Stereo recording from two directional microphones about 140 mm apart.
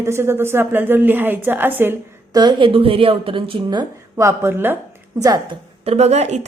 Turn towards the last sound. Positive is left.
turn(degrees=-55)  # may be behind; listen again after turning